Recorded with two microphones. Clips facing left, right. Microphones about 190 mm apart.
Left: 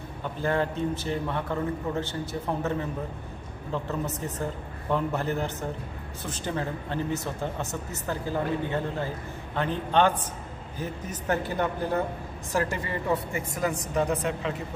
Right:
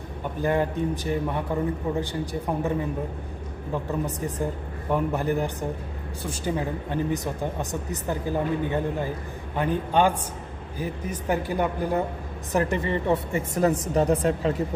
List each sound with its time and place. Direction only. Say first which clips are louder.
0.2 s speech: right 3 dB; 15° right (ahead or behind)
3.7 s a woman's voice: right 2 dB; 15° right (ahead or behind); by 14.1 s 35° right (ahead or behind)